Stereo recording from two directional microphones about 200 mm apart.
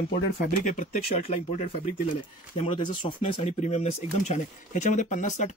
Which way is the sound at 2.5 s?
25° left (ahead or behind).